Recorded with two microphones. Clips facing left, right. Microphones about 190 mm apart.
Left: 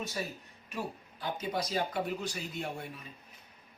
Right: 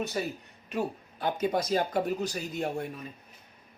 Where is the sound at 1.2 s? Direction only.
50° right (ahead or behind).